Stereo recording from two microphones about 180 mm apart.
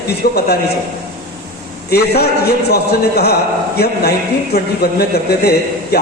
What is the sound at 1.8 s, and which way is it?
A man's voice, 60° left (ahead or behind).